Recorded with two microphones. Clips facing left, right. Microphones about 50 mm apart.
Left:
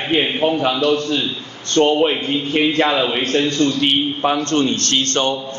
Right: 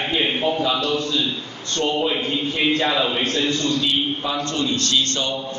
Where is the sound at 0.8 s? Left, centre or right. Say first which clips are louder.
Left 5 dB; left.